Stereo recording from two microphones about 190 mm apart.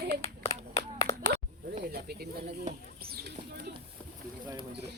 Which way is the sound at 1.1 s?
15° left (ahead or behind).